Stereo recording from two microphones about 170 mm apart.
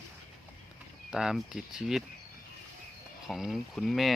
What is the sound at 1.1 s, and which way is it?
Speech, 5° right (ahead or behind).